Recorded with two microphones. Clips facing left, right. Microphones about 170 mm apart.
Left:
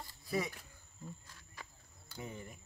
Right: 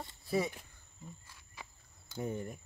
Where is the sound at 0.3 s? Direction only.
30° right (ahead or behind).